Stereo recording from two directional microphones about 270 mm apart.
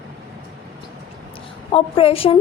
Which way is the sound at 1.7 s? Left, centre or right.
Centre.